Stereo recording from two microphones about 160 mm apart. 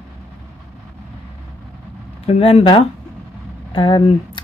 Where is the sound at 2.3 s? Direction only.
40° left (ahead or behind).